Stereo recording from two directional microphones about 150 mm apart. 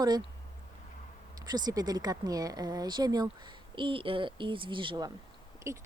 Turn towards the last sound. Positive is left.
turn(degrees=-20)  # may be behind; listen again after turning